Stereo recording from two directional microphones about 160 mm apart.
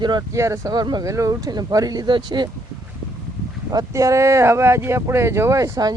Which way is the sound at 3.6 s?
20° right (ahead or behind).